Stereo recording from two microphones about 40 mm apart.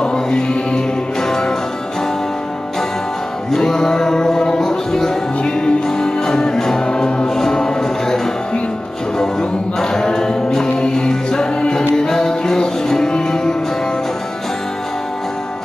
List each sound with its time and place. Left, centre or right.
0.0 s music: centre
3.5 s music: centre
9.2 s a capella: centre
11.9 s music: centre